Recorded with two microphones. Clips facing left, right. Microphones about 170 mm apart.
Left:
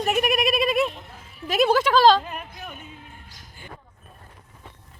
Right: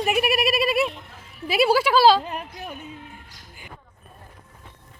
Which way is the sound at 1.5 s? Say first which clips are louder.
Even; 10° right (ahead or behind).